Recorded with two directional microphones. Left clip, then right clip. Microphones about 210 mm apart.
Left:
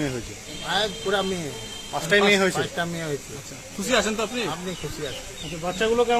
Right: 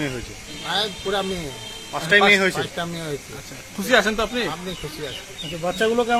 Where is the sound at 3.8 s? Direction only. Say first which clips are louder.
Right 5 dB; 20° right (ahead or behind).